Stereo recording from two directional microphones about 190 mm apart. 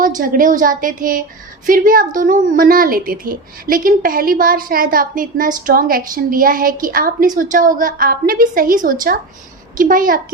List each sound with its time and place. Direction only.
0.0 s a woman's voice: 45° right (ahead or behind)